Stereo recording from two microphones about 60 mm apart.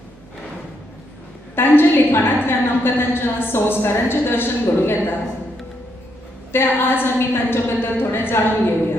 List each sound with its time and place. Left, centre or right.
1.5 s a woman's voice: left
6.5 s a woman's voice: left